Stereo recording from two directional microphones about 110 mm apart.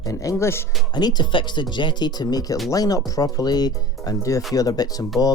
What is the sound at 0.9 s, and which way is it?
Speech, 40° left (ahead or behind).